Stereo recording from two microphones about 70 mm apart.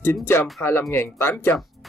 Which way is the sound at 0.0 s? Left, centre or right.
Left.